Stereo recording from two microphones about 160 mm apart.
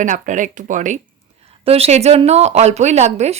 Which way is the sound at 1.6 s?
40° right (ahead or behind).